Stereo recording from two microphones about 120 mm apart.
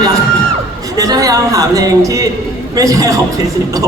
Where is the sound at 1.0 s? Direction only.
30° right (ahead or behind).